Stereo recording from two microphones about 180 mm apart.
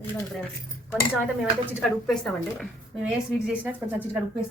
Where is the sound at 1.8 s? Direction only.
Centre (ahead or behind).